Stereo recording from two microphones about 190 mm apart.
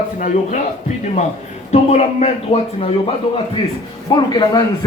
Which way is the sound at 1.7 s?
35° left (ahead or behind).